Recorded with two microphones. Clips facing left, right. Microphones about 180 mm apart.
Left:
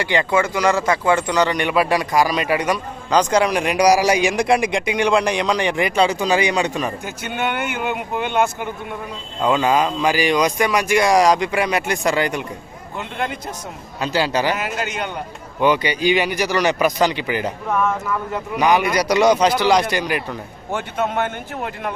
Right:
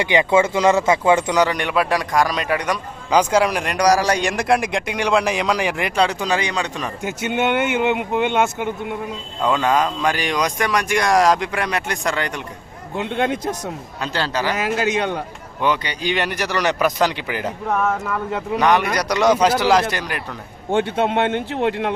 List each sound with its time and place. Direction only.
0.0 s speech: 20° right (ahead or behind)
1.5 s a man's voice: centre (ahead or behind)
3.1 s a man's voice: 5° right (ahead or behind)
7.0 s speech: 20° right (ahead or behind)
9.4 s a man's voice: 5° left (ahead or behind)
14.0 s speech: 10° left (ahead or behind)
15.6 s a man's voice: 5° left (ahead or behind)
18.6 s a man's voice: 5° left (ahead or behind)
20.7 s speech: 30° right (ahead or behind)